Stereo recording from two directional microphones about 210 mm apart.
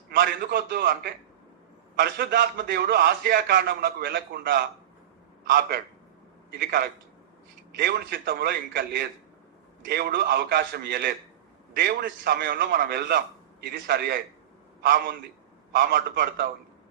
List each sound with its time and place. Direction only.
0.1 s a man's voice: 50° right (ahead or behind)